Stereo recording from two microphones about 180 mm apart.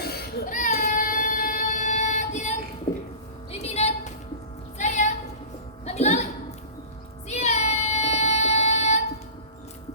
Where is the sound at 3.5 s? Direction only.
35° left (ahead or behind).